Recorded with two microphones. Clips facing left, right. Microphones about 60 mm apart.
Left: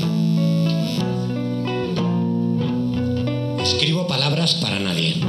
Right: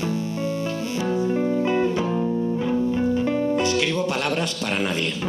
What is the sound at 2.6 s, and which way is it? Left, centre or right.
Music, right.